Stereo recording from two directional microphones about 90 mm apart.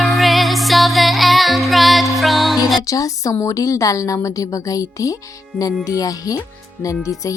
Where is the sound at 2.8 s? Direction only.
40° left (ahead or behind).